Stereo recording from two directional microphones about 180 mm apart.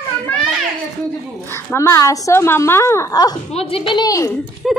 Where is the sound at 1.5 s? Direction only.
15° left (ahead or behind).